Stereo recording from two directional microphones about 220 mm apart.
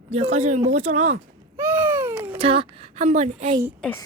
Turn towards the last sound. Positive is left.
turn(degrees=10)  # may be behind; listen again after turning